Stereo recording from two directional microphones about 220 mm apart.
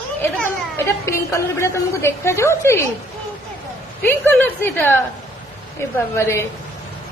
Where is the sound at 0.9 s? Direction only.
15° left (ahead or behind).